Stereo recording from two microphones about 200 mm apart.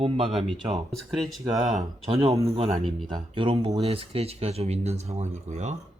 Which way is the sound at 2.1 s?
30° right (ahead or behind).